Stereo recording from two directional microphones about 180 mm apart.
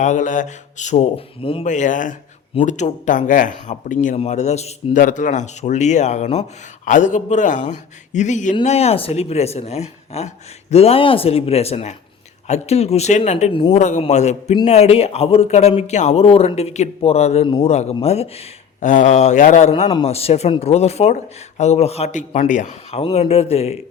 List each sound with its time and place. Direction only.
0.0 s speech: 45° left (ahead or behind)
1.6 s a man's voice: 45° left (ahead or behind)
13.8 s speech: 40° left (ahead or behind)